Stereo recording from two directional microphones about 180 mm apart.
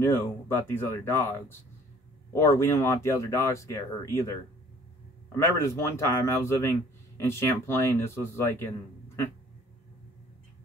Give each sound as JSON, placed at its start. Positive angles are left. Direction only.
{"t": 0.0, "sound": "speech", "side_deg": 15}
{"t": 2.3, "sound": "speech", "side_deg": 15}
{"t": 5.4, "sound": "speech", "side_deg": 15}